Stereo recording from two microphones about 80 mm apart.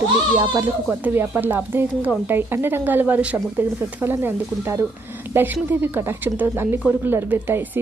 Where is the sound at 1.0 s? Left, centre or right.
Right.